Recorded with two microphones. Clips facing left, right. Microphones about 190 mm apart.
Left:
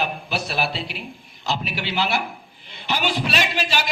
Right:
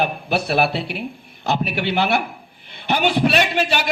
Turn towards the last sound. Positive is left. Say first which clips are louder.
# right 5 dB
turn(degrees=-55)  # may be behind; listen again after turning